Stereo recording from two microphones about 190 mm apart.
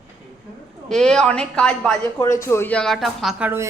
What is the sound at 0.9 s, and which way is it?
Speech, 5° left (ahead or behind).